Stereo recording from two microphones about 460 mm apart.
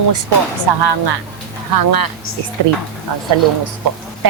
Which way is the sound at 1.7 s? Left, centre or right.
Right.